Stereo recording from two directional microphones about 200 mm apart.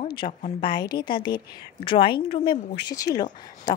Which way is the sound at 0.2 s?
30° left (ahead or behind).